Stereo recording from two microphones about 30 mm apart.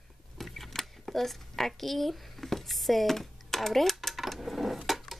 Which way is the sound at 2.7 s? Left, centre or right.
Centre.